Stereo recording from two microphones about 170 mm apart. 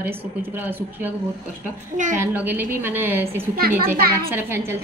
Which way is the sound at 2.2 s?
10° right (ahead or behind).